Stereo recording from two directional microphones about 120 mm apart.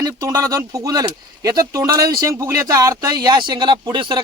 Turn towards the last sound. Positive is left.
turn(degrees=-40)  # may be behind; listen again after turning